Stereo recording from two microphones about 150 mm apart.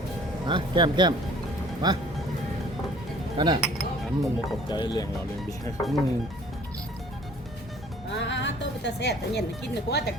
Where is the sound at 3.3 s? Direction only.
30° right (ahead or behind).